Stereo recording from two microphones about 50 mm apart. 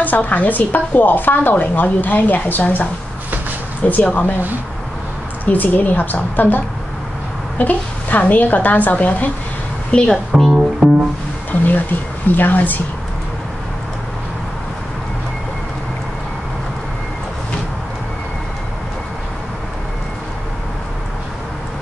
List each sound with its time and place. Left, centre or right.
0.0 s speech: left
3.9 s speech: left
5.4 s speech: left
9.8 s a woman's voice: left
10.3 s speech: centre
11.5 s a sound: left
12.3 s speech: left